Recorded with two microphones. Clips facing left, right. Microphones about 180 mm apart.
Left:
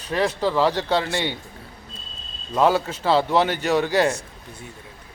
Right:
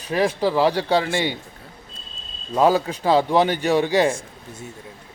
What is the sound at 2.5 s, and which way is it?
Speech, 15° right (ahead or behind).